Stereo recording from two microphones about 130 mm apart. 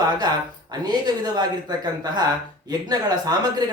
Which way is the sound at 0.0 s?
35° right (ahead or behind).